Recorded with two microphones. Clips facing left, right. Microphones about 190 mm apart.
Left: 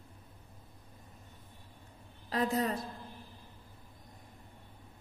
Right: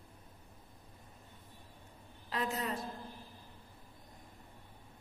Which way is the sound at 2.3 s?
35° left (ahead or behind).